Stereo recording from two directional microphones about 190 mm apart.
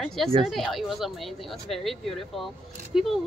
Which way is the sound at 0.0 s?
Centre (ahead or behind).